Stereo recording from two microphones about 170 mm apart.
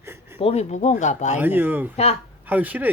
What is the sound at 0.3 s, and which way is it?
Speech, 35° left (ahead or behind).